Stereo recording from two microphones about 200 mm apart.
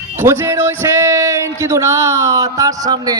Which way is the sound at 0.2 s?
10° right (ahead or behind).